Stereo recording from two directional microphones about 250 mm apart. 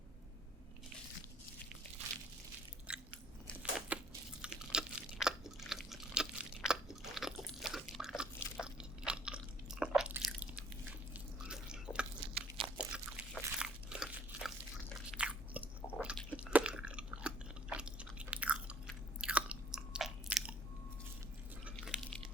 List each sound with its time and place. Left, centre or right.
2.9 s biting: centre
3.6 s a sound: centre
4.4 s chewing: centre
11.1 s drip: centre
12.3 s biting: centre
12.7 s crunch: centre
15.2 s chewing: centre
21.6 s a sound: centre